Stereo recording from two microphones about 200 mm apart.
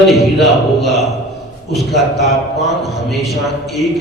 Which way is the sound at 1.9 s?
Centre (ahead or behind).